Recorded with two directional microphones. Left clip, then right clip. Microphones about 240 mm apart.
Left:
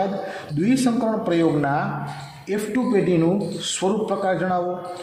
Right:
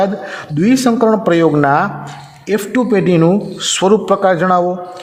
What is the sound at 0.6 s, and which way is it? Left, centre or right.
A man's voice, right.